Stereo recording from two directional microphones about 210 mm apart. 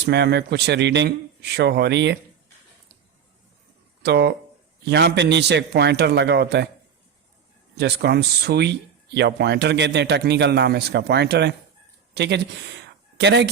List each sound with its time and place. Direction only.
0.0 s speech: 55° right (ahead or behind)
4.0 s speech: 50° right (ahead or behind)
7.8 s speech: 50° right (ahead or behind)